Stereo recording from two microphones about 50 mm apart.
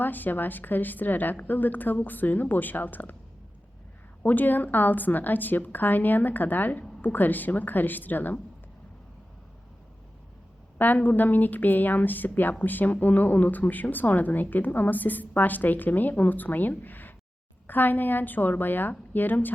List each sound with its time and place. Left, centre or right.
0.0 s speech: left
4.2 s speech: left
10.8 s speech: left